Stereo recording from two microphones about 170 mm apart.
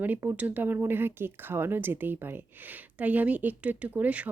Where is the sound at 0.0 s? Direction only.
15° right (ahead or behind).